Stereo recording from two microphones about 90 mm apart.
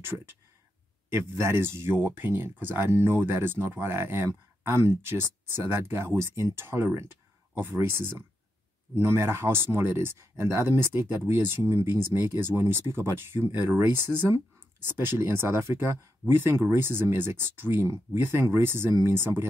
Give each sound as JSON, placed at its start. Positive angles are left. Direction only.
{"t": 1.1, "sound": "speech", "side_deg": -30}